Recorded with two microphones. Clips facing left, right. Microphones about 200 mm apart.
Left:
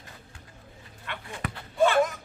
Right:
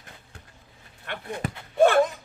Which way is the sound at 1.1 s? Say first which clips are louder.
Right 3 dB; 55° right (ahead or behind).